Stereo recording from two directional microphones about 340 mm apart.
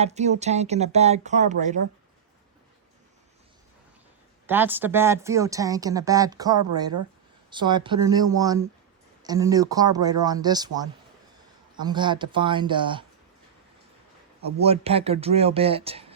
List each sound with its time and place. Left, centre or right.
0.0 s speech: centre
4.4 s a woman's voice: centre
14.4 s a woman's voice: centre